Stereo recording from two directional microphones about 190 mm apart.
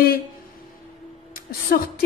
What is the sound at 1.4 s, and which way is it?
Speech, 50° left (ahead or behind).